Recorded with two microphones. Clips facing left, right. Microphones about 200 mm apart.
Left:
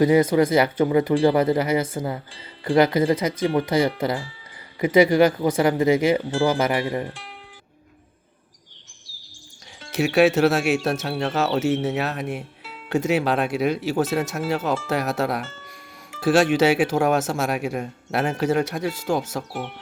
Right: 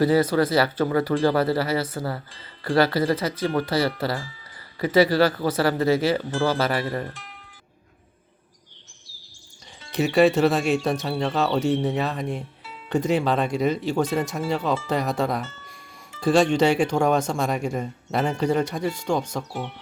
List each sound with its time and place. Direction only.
0.0 s speech: 20° left (ahead or behind)
9.9 s speech: centre (ahead or behind)